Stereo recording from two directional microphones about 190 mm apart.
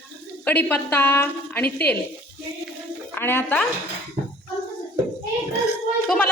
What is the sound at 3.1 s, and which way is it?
Speech, 10° left (ahead or behind).